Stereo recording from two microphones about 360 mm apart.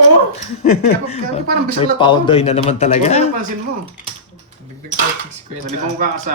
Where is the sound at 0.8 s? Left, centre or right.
Centre.